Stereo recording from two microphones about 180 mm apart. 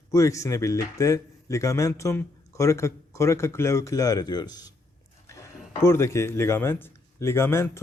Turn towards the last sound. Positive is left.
turn(degrees=15)  # may be behind; listen again after turning